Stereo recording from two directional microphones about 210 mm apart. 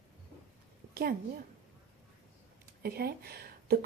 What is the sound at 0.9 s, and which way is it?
Speech, 45° right (ahead or behind).